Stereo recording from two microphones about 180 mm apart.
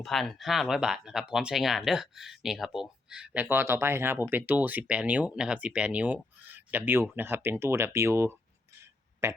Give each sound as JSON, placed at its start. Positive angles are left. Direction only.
{"t": 0.0, "sound": "speech", "side_deg": 0}